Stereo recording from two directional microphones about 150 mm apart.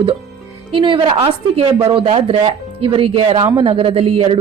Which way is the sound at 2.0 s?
40° right (ahead or behind).